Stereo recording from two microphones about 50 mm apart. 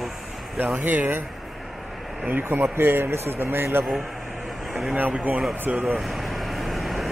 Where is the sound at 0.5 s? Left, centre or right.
Right.